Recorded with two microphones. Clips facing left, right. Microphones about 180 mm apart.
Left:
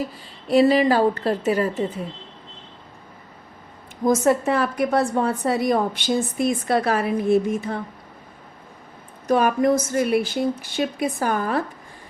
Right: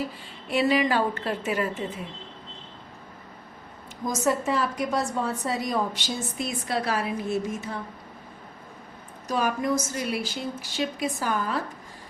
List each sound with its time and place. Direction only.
0.4 s a woman's voice: 35° left (ahead or behind)
4.0 s a woman's voice: 60° left (ahead or behind)
9.2 s a woman's voice: 55° left (ahead or behind)